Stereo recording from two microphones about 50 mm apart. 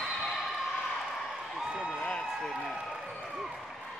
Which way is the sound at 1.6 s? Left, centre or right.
Centre.